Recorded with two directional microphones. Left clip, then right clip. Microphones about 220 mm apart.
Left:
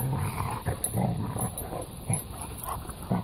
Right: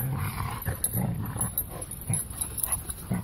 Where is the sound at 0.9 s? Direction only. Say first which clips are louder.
Left 4 dB; 35° right (ahead or behind).